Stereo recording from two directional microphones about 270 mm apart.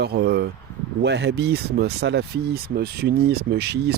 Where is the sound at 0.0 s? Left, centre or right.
Right.